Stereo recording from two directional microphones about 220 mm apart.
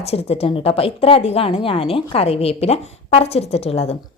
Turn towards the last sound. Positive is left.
turn(degrees=25)  # may be behind; listen again after turning